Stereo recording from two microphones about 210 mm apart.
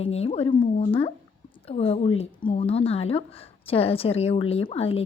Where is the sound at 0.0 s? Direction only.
30° left (ahead or behind).